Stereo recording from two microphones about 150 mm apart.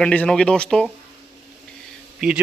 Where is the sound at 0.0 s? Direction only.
5° left (ahead or behind).